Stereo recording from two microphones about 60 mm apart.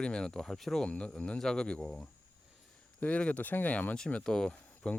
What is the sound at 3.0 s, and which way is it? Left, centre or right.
Speech, left.